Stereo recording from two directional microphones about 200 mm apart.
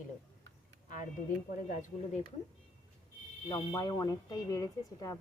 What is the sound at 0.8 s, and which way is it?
A woman's voice, 40° left (ahead or behind).